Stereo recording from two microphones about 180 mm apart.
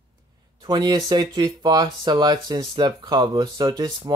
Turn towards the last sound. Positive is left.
turn(degrees=-20)  # may be behind; listen again after turning